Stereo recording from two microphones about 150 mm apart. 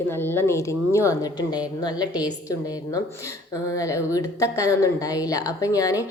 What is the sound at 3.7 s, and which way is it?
A woman's voice, 20° left (ahead or behind).